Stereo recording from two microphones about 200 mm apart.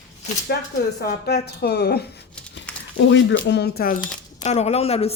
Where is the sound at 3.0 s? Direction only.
65° left (ahead or behind); by 4.0 s 50° left (ahead or behind).